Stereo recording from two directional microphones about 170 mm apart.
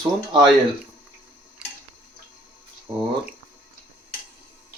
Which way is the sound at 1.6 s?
5° right (ahead or behind).